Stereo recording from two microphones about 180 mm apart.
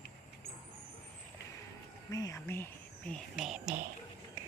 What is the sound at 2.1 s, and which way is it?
Speech, 20° left (ahead or behind).